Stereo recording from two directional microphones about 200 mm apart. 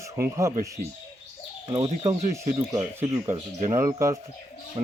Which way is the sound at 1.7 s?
25° right (ahead or behind).